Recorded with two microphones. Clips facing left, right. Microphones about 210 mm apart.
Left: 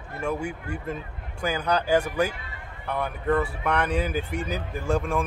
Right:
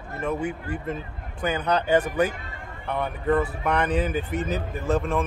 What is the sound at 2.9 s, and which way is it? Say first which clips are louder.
Speech: right 1 dB; 5° right (ahead or behind).